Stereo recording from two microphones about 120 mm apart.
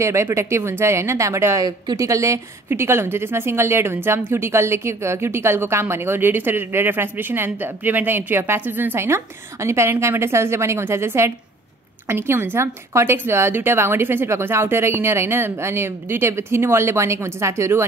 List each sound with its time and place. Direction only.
0.0 s a woman's voice: 25° right (ahead or behind)